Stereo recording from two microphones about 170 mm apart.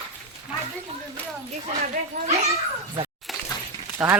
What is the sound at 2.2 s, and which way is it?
Speech, 40° right (ahead or behind).